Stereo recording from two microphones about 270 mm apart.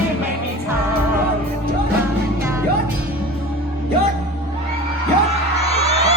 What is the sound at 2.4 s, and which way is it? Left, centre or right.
Music, centre.